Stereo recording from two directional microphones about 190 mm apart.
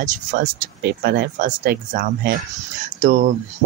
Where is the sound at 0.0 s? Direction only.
45° right (ahead or behind).